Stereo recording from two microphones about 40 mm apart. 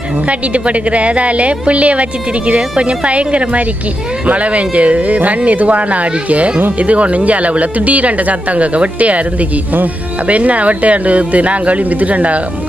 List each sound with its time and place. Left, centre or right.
0.7 s speech: right
6.9 s speech: right
10.2 s speech: right